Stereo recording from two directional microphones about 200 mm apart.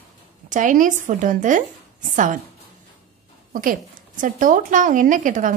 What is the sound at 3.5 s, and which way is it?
A woman's voice, 40° right (ahead or behind).